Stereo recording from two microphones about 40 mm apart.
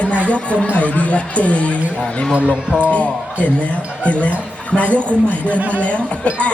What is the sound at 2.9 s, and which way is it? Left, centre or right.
Speech, left.